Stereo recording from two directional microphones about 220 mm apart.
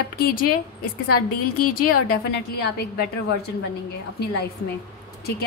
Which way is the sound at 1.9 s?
90° left.